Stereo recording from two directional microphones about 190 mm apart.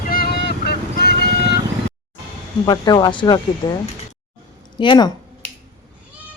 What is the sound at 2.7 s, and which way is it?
Speech, 20° left (ahead or behind).